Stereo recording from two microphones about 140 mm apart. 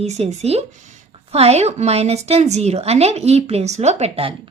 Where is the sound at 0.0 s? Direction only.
50° right (ahead or behind).